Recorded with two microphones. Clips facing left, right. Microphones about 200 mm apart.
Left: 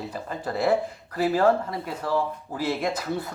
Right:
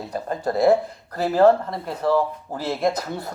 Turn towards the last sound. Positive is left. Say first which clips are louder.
# right 4 dB
turn(degrees=-40)  # may be behind; listen again after turning